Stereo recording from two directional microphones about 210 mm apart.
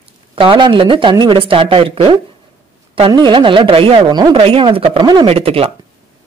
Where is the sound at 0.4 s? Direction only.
20° right (ahead or behind).